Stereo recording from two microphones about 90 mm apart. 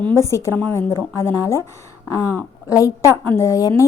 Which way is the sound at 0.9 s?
35° left (ahead or behind).